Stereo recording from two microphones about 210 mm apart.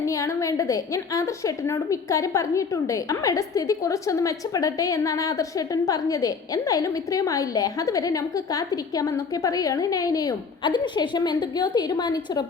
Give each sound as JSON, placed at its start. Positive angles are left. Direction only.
{"t": 0.0, "sound": "a woman's voice", "side_deg": 15}